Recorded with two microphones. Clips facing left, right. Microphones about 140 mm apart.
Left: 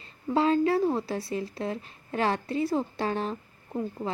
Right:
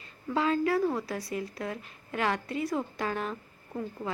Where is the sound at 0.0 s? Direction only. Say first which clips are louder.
Left 4 dB; 30° left (ahead or behind).